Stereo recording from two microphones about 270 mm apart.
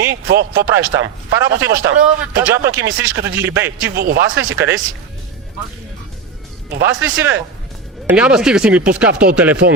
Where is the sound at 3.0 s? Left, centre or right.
Right.